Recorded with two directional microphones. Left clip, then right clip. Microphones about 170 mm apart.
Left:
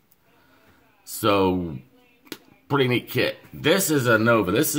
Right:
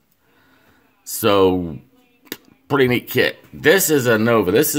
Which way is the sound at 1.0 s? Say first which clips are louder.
Right 6 dB; 40° right (ahead or behind).